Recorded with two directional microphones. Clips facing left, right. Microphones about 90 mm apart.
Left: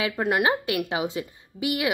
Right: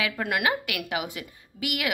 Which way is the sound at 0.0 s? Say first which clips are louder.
Left 3 dB; 25° left (ahead or behind).